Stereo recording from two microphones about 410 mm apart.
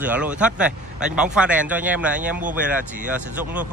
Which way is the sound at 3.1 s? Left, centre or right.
Centre.